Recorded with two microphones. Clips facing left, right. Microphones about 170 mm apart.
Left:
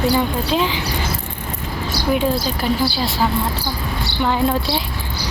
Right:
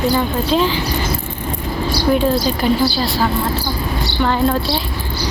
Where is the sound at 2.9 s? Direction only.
20° left (ahead or behind).